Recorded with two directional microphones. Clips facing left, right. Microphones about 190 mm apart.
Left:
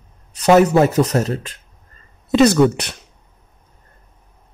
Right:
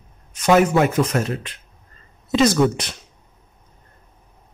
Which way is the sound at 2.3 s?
65° left (ahead or behind).